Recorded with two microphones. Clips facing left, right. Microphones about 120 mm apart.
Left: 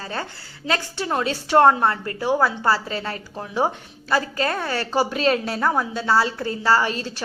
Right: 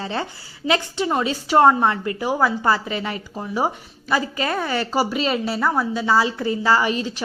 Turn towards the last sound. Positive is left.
turn(degrees=-10)  # may be behind; listen again after turning